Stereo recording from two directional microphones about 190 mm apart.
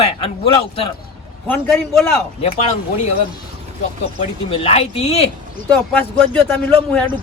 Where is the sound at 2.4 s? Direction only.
35° left (ahead or behind).